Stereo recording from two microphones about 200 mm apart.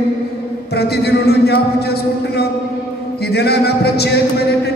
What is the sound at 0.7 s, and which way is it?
A man's voice, 55° left (ahead or behind).